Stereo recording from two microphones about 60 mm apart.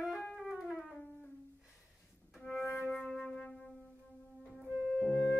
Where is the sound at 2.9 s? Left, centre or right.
Centre.